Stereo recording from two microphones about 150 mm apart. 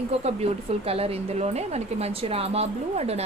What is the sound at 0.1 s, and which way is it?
Speech, 45° right (ahead or behind).